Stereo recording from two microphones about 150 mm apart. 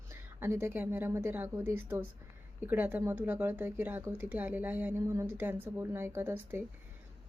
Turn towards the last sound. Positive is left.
turn(degrees=-15)  # may be behind; listen again after turning